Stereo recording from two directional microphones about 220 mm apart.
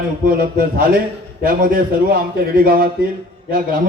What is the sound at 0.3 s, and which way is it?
A man's voice, 40° right (ahead or behind).